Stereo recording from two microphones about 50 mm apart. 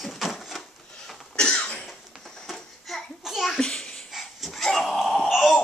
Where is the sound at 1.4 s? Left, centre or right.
Centre.